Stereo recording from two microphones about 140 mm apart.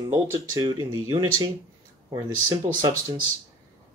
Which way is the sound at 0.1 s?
25° right (ahead or behind).